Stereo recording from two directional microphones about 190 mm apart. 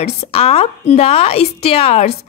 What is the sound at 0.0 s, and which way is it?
A woman's voice, 35° left (ahead or behind).